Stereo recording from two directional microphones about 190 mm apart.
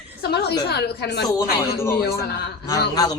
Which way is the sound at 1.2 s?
15° left (ahead or behind).